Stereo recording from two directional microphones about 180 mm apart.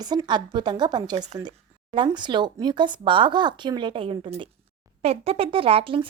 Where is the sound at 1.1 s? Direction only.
40° right (ahead or behind).